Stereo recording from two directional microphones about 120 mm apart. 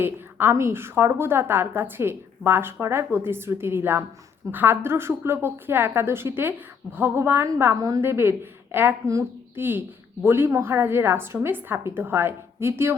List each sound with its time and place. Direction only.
0.0 s a woman's voice: 20° right (ahead or behind)